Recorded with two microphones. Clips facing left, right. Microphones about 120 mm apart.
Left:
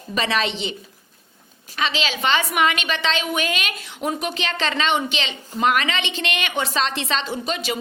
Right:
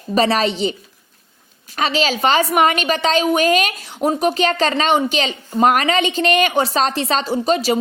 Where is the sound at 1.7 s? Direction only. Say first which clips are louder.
Right 6 dB; 40° right (ahead or behind).